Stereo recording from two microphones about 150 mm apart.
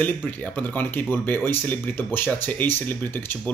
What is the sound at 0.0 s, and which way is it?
Speech, 10° left (ahead or behind).